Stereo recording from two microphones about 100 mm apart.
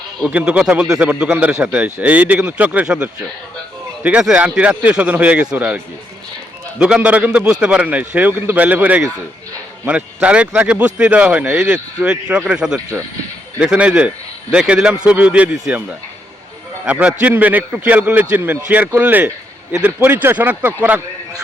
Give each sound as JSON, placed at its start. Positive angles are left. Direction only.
{"t": 0.3, "sound": "a man's voice", "side_deg": -10}
{"t": 16.8, "sound": "a man's voice", "side_deg": -10}